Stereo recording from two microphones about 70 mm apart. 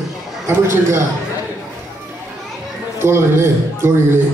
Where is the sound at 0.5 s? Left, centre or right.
Right.